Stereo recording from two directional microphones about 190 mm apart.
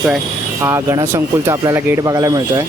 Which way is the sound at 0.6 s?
15° right (ahead or behind).